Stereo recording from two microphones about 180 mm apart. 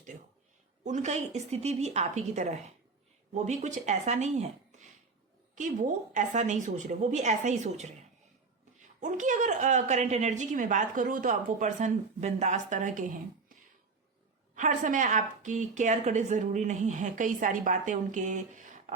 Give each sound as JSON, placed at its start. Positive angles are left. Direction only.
{"t": 0.9, "sound": "a woman's voice", "side_deg": -40}
{"t": 6.1, "sound": "a woman's voice", "side_deg": -40}
{"t": 9.0, "sound": "a woman's voice", "side_deg": -45}
{"t": 14.5, "sound": "a woman's voice", "side_deg": -45}